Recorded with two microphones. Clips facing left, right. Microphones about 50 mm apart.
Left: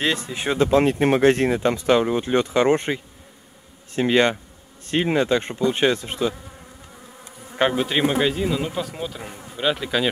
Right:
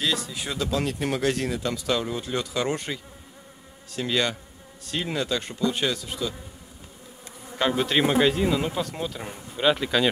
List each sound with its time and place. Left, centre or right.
0.0 s speech: left
7.7 s speech: centre